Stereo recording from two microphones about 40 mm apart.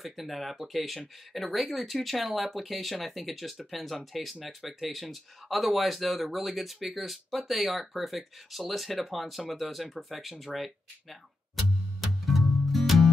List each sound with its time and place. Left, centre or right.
0.0 s speech: centre
12.3 s music: centre